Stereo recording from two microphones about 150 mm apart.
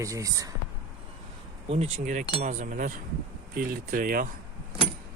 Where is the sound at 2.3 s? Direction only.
55° right (ahead or behind).